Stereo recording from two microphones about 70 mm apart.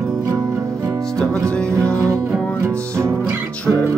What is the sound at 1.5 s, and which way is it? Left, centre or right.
Music, centre.